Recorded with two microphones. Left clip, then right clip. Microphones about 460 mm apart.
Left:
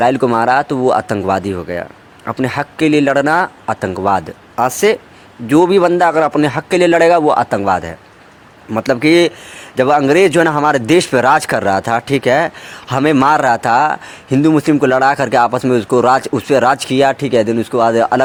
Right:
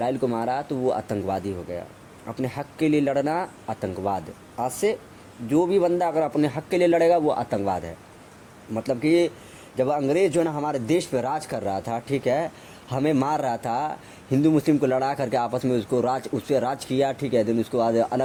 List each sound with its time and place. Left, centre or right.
0.0 s a man's voice: right